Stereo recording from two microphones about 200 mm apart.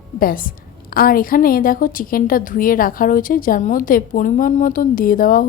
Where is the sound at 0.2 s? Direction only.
45° left (ahead or behind).